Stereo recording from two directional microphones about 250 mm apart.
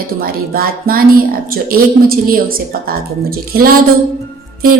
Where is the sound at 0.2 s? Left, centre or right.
Right.